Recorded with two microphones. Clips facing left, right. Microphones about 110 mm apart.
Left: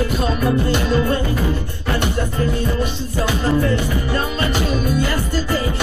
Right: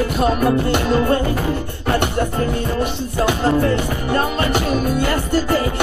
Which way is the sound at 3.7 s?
55° right (ahead or behind).